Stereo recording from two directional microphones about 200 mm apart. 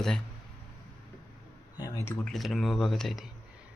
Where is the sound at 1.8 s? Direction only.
15° left (ahead or behind).